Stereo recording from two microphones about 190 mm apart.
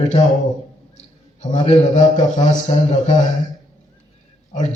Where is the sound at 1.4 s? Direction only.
35° left (ahead or behind).